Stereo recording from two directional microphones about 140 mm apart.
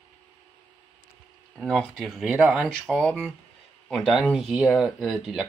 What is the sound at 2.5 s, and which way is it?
Speech, centre (ahead or behind).